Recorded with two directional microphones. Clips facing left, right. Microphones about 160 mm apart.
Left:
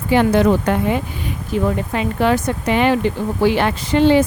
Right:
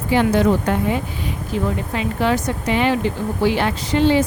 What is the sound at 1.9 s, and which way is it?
A woman's voice, 55° left (ahead or behind).